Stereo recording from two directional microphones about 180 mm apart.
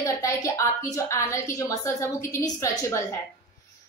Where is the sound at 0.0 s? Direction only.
15° left (ahead or behind).